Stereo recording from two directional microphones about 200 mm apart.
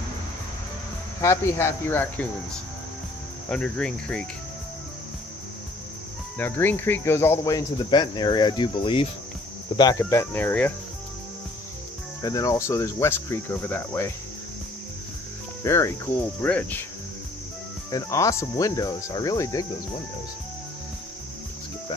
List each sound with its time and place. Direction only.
1.2 s cricket: 15° left (ahead or behind)
3.4 s cricket: 5° left (ahead or behind)
6.3 s cricket: 10° left (ahead or behind)
12.2 s cricket: 20° left (ahead or behind)
15.6 s speech: 15° left (ahead or behind)
16.3 s cricket: 10° left (ahead or behind)
17.9 s cricket: 15° left (ahead or behind)